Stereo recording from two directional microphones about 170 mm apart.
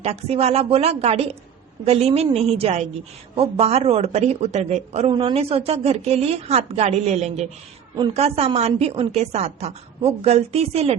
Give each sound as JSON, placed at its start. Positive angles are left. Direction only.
{"t": 0.0, "sound": "a woman's voice", "side_deg": -35}